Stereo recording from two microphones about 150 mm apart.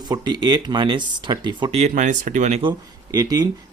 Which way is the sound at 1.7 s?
55° right (ahead or behind).